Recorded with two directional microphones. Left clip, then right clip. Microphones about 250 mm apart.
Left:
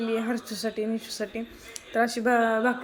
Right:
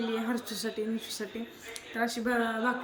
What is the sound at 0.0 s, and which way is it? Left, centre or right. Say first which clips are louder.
A woman's voice: left 4 dB; centre.